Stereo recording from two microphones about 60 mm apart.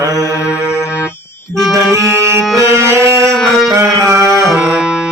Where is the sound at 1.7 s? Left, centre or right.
Right.